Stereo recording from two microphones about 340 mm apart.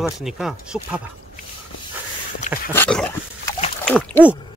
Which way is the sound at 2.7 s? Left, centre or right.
Centre.